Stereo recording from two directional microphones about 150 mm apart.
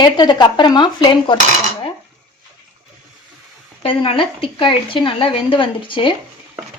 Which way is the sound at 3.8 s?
40° left (ahead or behind).